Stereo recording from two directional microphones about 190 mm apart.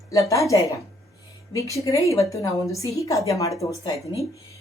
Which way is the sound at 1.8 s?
15° left (ahead or behind).